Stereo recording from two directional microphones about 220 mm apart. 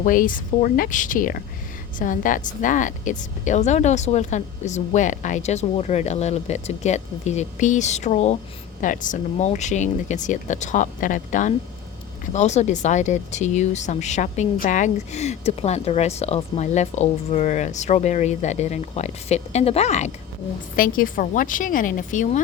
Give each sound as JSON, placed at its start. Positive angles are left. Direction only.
{"t": 0.0, "sound": "speech", "side_deg": 40}